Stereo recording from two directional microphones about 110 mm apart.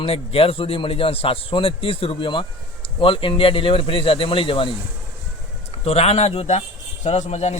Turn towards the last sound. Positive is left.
turn(degrees=90)